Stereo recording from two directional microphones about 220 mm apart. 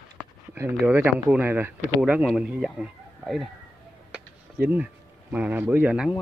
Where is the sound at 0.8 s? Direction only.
10° right (ahead or behind).